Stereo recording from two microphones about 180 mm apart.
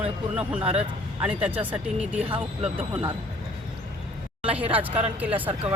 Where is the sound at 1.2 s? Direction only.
5° right (ahead or behind).